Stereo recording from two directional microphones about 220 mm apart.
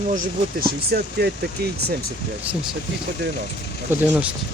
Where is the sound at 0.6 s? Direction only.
45° right (ahead or behind).